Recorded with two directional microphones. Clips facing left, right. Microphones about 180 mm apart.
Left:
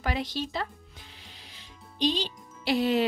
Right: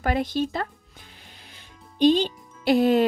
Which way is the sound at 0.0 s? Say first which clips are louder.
Right 7 dB; 50° right (ahead or behind).